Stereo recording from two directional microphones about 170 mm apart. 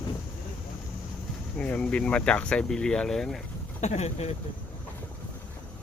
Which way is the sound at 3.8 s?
40° left (ahead or behind).